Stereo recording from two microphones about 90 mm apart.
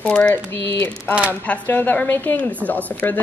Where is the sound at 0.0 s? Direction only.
15° left (ahead or behind).